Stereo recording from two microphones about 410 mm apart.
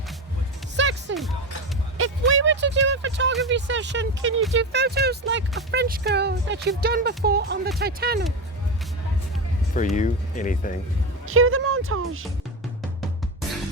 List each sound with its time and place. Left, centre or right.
0.8 s music: right
2.0 s a sound: right
3.5 s speech: right
9.7 s speech: centre
11.3 s speech: right